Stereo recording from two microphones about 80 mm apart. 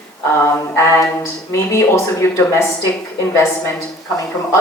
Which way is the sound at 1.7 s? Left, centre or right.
Left.